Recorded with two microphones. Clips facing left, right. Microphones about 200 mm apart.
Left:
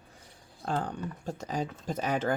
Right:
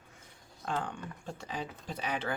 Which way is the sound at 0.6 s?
35° left (ahead or behind).